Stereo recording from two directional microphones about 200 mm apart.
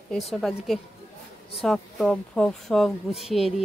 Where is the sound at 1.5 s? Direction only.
Centre (ahead or behind).